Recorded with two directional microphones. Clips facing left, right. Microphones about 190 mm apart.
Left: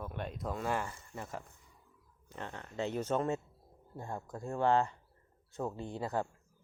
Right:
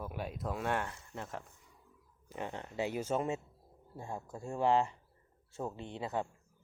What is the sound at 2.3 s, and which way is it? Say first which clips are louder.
Speech: right 3 dB; 15° right (ahead or behind).